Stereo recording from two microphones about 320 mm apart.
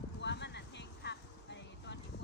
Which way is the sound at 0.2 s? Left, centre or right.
Left.